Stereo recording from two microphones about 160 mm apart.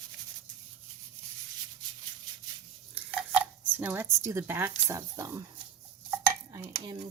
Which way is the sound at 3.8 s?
15° right (ahead or behind).